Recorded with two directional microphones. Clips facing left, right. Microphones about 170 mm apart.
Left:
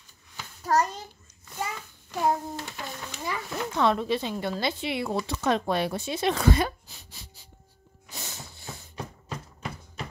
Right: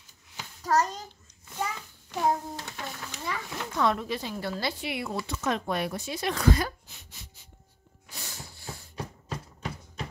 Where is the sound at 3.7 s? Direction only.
25° left (ahead or behind).